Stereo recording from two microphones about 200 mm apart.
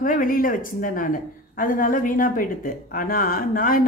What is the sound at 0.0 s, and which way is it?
Speech, 40° left (ahead or behind).